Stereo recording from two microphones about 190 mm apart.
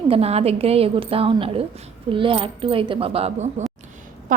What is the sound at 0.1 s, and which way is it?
A woman's voice, 30° right (ahead or behind).